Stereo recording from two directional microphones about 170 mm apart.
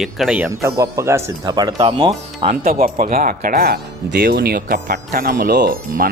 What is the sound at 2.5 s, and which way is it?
Speech, 55° right (ahead or behind).